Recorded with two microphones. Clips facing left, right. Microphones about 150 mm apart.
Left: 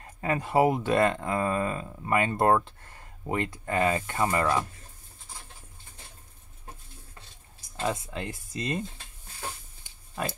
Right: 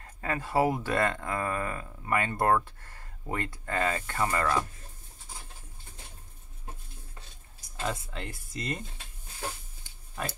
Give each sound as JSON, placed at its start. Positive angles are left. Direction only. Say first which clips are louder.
{"t": 0.0, "sound": "speech", "louder": "left 4 dB", "side_deg": 20}
{"t": 7.8, "sound": "speech", "louder": "left 4 dB", "side_deg": 20}